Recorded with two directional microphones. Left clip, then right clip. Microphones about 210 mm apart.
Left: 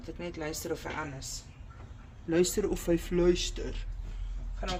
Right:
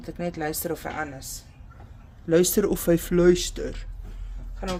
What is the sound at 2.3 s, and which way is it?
Speech, 55° right (ahead or behind).